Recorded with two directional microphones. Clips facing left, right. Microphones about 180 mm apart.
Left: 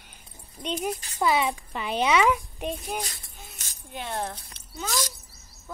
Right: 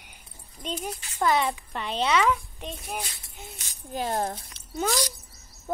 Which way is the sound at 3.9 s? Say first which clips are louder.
Right 4 dB; 40° right (ahead or behind).